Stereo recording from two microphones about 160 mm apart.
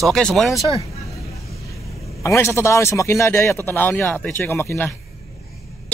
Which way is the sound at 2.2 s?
15° left (ahead or behind).